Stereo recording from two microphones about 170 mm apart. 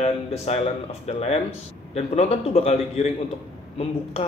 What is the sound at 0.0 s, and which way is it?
A man's voice, 40° left (ahead or behind).